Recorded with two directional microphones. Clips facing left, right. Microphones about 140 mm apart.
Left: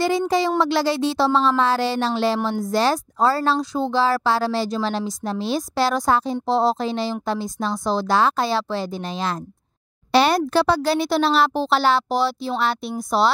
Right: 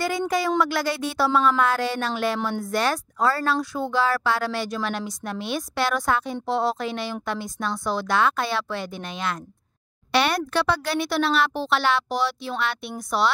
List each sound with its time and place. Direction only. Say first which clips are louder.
0.6 s speech: left 4 dB; 30° left (ahead or behind)